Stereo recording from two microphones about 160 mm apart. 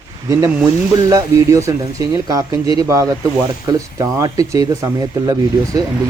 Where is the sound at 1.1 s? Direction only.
20° right (ahead or behind).